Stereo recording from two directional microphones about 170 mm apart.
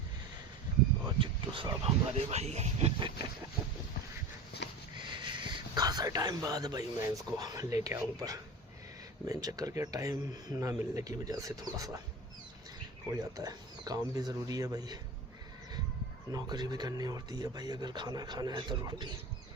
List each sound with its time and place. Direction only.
1.0 s speech: 25° right (ahead or behind)
4.6 s sniff: 85° left
4.9 s speech: 30° right (ahead or behind)
13.1 s speech: 20° right (ahead or behind)
16.3 s speech: 25° right (ahead or behind)